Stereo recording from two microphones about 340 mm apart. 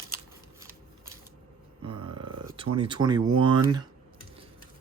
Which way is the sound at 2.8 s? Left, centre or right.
Centre.